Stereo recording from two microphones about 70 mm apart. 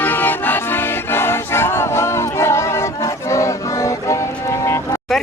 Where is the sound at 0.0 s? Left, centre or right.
Left.